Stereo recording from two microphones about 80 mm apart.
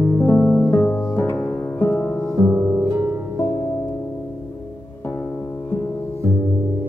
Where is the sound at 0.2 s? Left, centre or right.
Left.